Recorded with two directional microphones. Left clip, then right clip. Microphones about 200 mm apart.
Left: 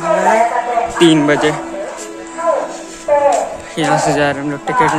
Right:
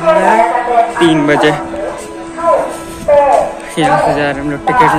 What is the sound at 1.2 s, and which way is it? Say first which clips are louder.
Speech: right 3 dB; 10° left (ahead or behind).